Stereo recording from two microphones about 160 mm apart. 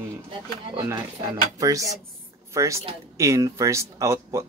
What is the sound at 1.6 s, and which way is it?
Speech, 20° right (ahead or behind).